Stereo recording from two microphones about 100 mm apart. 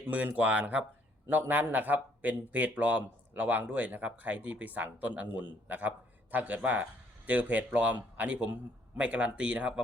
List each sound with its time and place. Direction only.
0.0 s a man's voice: 15° right (ahead or behind)